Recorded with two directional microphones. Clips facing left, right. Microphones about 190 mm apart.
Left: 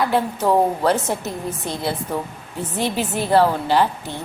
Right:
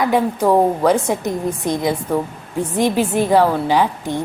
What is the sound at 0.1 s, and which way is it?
A woman's voice, 10° right (ahead or behind).